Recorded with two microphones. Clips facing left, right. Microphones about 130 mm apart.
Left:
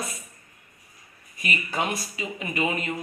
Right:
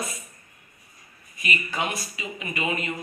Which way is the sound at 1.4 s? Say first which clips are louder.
Even; 40° left (ahead or behind).